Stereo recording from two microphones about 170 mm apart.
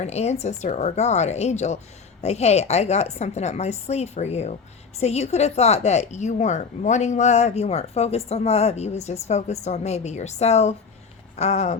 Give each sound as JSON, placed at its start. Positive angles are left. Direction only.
{"t": 0.0, "sound": "a woman's voice", "side_deg": 40}